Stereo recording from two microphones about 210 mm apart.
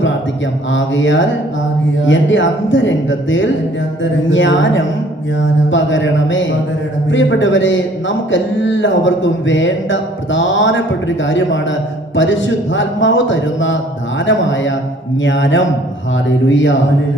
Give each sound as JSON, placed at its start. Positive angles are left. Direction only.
{"t": 0.7, "sound": "a man's voice", "side_deg": 65}